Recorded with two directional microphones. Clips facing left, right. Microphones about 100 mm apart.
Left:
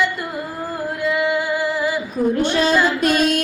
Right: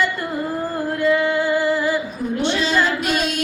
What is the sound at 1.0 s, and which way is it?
Music, 10° left (ahead or behind).